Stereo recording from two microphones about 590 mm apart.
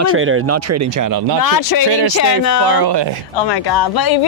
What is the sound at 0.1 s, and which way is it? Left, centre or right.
Speech, right.